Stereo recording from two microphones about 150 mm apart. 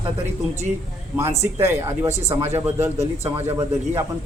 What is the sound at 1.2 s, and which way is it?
Speech, 20° right (ahead or behind).